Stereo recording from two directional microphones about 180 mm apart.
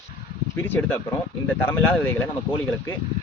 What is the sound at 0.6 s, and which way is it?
Speech, 10° left (ahead or behind).